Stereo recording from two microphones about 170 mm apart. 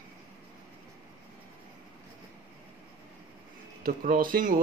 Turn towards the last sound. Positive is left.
turn(degrees=-55)  # may be behind; listen again after turning